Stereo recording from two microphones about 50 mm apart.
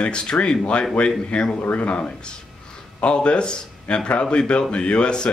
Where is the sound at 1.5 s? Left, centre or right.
Left.